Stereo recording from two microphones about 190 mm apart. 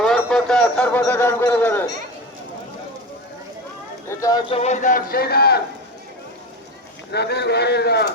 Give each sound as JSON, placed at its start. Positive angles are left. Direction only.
{"t": 0.0, "sound": "a sound", "side_deg": 5}
{"t": 4.1, "sound": "a man's voice", "side_deg": 20}
{"t": 7.1, "sound": "speech", "side_deg": 60}